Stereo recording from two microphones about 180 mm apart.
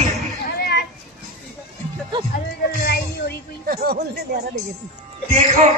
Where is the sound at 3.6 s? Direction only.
60° right (ahead or behind).